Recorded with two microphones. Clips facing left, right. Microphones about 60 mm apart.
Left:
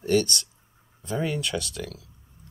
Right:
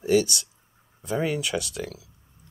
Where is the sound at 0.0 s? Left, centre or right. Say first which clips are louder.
Right 2 dB; centre.